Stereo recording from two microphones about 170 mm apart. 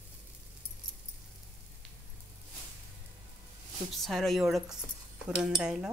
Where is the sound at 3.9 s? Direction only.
Centre (ahead or behind).